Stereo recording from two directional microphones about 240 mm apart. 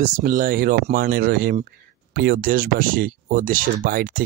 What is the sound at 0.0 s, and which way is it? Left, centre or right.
Speech, right.